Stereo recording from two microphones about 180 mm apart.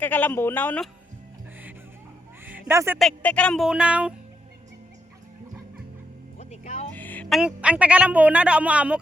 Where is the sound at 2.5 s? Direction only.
10° right (ahead or behind).